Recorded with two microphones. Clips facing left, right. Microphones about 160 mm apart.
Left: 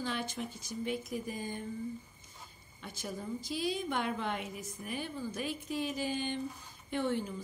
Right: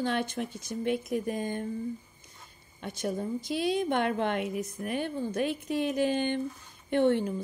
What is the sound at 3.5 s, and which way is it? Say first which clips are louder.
Speech: right 7 dB; 60° right (ahead or behind).